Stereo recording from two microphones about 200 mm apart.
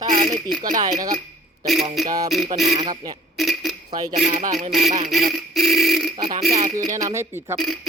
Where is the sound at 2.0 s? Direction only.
Centre (ahead or behind).